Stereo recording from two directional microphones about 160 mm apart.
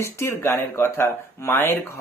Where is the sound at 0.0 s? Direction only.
15° left (ahead or behind).